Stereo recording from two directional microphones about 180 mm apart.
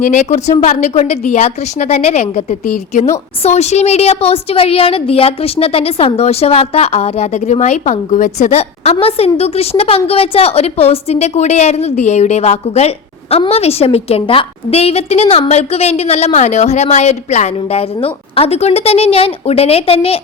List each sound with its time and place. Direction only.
0.0 s a woman's voice: 40° left (ahead or behind)